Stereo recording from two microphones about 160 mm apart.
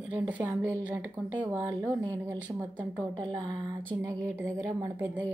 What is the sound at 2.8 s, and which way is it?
A woman's voice, 30° right (ahead or behind).